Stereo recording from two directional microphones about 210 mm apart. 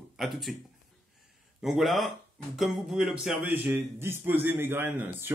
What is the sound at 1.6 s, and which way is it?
A man's voice, centre (ahead or behind).